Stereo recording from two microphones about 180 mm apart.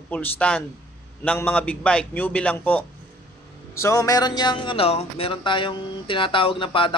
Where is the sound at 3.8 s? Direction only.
20° left (ahead or behind).